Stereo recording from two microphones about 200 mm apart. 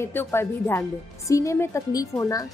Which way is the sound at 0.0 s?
10° left (ahead or behind).